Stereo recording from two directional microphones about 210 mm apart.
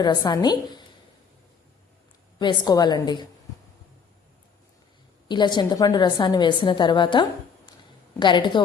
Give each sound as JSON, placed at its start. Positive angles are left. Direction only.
{"t": 0.0, "sound": "a woman's voice", "side_deg": 20}
{"t": 2.4, "sound": "a woman's voice", "side_deg": 20}
{"t": 5.3, "sound": "a woman's voice", "side_deg": 20}